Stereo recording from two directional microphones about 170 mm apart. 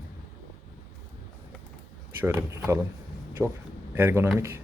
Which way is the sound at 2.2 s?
15° right (ahead or behind).